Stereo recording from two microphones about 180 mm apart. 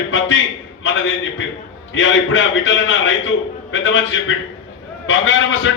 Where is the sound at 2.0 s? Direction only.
90° left.